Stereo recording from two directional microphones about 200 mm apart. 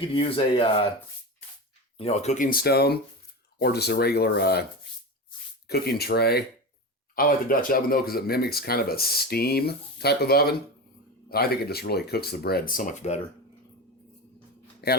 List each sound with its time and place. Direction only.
0.1 s speech: 25° left (ahead or behind)
2.0 s speech: 30° left (ahead or behind); by 4.6 s 55° left (ahead or behind)
5.6 s speech: 50° left (ahead or behind); by 13.1 s 35° left (ahead or behind)
14.8 s speech: 55° left (ahead or behind)